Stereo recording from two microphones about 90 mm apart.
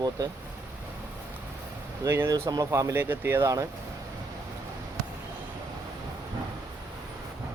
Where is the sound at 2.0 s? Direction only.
30° right (ahead or behind).